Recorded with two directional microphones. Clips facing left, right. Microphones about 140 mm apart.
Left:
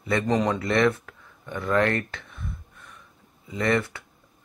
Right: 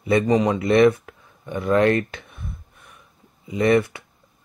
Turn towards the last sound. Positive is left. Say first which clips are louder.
# right 6 dB
turn(degrees=-15)  # may be behind; listen again after turning